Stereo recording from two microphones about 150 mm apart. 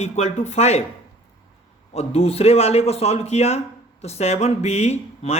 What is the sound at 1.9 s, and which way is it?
A man's voice, 45° left (ahead or behind).